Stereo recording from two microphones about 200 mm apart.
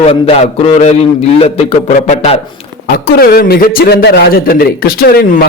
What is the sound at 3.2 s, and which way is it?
A man's voice, 50° left (ahead or behind).